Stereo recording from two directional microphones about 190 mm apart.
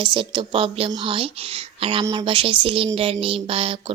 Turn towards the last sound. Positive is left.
turn(degrees=-30)  # may be behind; listen again after turning